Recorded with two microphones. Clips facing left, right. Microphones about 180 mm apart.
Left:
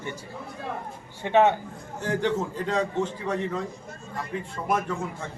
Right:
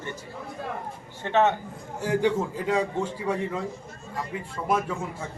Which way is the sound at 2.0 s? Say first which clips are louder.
Right 2 dB; 10° right (ahead or behind).